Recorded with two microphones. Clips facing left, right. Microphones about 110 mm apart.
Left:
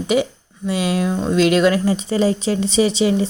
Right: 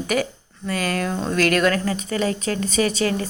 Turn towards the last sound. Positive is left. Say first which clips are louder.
# left 4 dB
turn(degrees=25)  # may be behind; listen again after turning